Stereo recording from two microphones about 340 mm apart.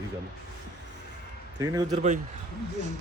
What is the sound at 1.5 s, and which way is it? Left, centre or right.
Speech, centre.